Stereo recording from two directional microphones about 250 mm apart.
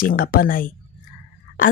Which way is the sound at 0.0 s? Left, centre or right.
Left.